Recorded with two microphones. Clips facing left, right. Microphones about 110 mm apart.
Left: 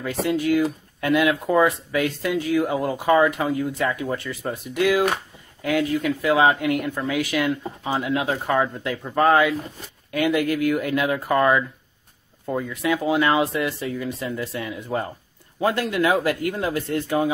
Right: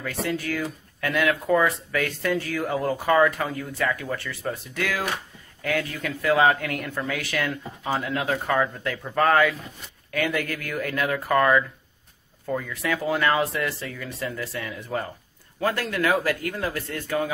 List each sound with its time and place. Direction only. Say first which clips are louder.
0.0 s speech: left 5 dB; 20° left (ahead or behind)